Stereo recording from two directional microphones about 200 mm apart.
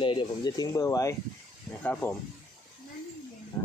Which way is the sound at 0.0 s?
25° left (ahead or behind).